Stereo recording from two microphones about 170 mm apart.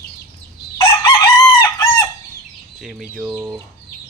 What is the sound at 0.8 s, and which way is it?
Chicken, 30° left (ahead or behind).